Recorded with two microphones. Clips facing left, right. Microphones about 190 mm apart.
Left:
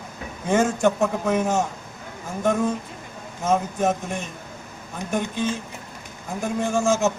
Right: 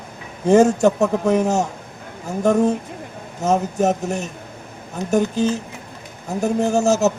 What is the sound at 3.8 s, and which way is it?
A man's voice, 45° right (ahead or behind).